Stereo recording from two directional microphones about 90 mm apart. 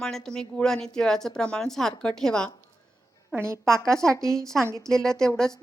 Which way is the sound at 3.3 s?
25° right (ahead or behind).